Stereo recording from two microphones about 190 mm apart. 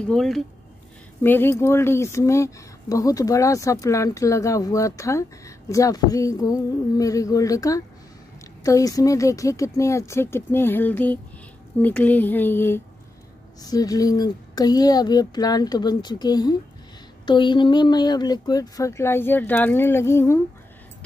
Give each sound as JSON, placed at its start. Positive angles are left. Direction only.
{"t": 0.0, "sound": "speech", "side_deg": 0}